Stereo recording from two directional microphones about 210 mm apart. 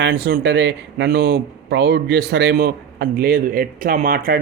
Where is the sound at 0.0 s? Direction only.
50° right (ahead or behind).